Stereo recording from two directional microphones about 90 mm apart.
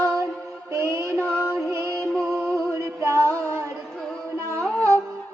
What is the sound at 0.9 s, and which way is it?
Mantra, 35° right (ahead or behind).